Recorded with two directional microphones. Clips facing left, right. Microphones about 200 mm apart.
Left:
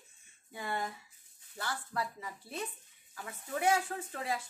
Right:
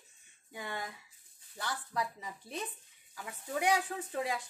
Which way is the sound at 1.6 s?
15° right (ahead or behind).